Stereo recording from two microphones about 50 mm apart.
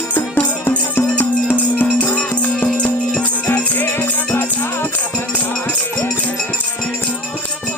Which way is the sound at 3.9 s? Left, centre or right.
Left.